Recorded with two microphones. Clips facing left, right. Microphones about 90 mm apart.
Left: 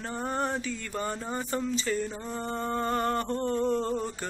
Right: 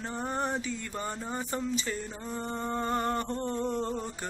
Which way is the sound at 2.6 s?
10° right (ahead or behind).